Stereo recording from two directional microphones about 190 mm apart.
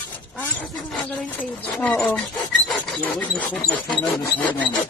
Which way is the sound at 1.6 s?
5° left (ahead or behind).